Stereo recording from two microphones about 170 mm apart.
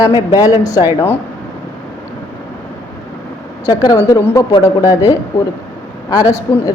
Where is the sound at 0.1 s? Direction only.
20° left (ahead or behind).